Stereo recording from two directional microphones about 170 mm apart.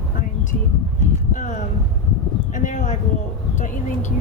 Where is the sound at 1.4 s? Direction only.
50° left (ahead or behind).